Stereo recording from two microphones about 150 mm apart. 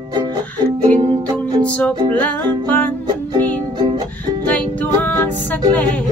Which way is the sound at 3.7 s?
30° right (ahead or behind).